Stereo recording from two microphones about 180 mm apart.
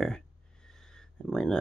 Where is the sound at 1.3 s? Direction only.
5° left (ahead or behind).